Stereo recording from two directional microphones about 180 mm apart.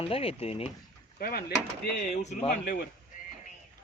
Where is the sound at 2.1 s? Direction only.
40° left (ahead or behind).